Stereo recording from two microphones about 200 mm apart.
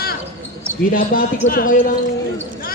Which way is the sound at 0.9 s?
45° left (ahead or behind).